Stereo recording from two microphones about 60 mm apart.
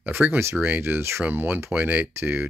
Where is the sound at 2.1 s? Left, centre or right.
Right.